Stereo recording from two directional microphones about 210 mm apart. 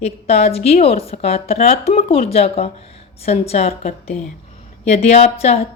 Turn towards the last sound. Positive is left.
turn(degrees=30)  # may be behind; listen again after turning